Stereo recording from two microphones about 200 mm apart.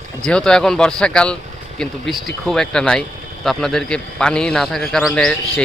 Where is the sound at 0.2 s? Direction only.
5° left (ahead or behind).